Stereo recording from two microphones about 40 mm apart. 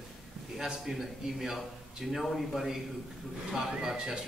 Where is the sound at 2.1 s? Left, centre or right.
Centre.